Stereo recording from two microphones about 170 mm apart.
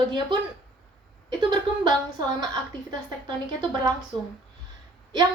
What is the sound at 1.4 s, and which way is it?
Speech, 25° right (ahead or behind).